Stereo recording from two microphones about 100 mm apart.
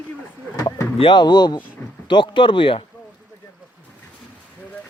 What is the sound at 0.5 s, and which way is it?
Speech, 40° left (ahead or behind).